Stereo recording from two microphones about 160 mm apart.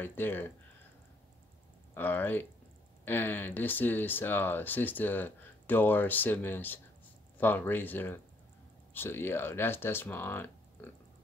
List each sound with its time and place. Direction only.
0.0 s speech: 15° left (ahead or behind)
2.0 s speech: 10° left (ahead or behind)